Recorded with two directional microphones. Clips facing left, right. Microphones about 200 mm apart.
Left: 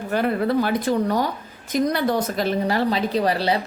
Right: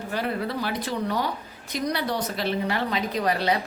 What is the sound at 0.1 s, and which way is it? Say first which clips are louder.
A woman's voice: left 8 dB; 50° left (ahead or behind).